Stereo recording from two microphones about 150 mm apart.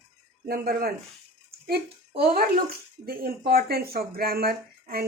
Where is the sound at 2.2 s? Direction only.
85° right.